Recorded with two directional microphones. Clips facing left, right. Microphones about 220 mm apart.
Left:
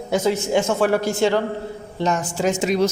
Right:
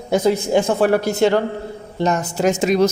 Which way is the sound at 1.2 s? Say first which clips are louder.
Right 3 dB; 55° right (ahead or behind).